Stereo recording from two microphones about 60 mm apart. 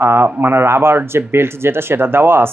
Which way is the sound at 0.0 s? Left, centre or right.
Right.